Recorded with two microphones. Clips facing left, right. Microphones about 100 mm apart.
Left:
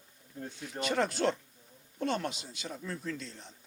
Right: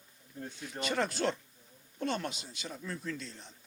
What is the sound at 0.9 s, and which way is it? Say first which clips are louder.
Speech: left 2 dB; 50° left (ahead or behind).